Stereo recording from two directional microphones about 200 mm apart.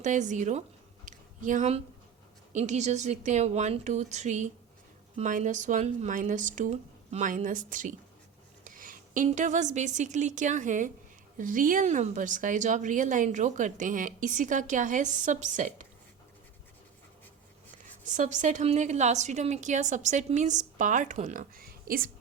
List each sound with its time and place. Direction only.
0.0 s a woman's voice: 40° right (ahead or behind)
1.0 s a sound: 40° right (ahead or behind)
2.5 s a woman's voice: 35° right (ahead or behind)
18.2 s a woman's voice: 35° right (ahead or behind)